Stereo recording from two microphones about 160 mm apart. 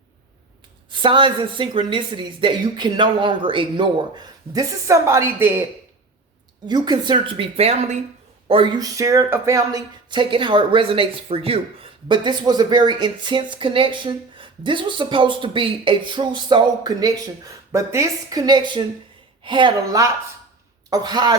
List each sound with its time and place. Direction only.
0.9 s speech: 30° right (ahead or behind); by 5.6 s 15° right (ahead or behind)
6.7 s a woman's voice: 25° right (ahead or behind)